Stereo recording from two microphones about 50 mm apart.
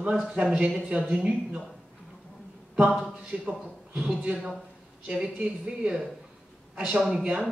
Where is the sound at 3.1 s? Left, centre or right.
Centre.